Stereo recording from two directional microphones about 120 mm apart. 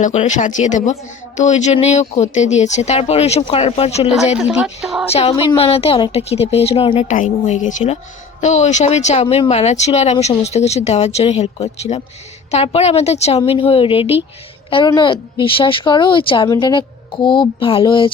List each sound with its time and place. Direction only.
0.0 s speech: 80° left; by 4.1 s 60° left (ahead or behind)
4.4 s speech: 5° right (ahead or behind)
5.5 s speech: 55° left (ahead or behind)
7.0 s speech: 75° left (ahead or behind)
8.4 s speech: 75° left (ahead or behind)
13.4 s a woman's voice: 50° left (ahead or behind)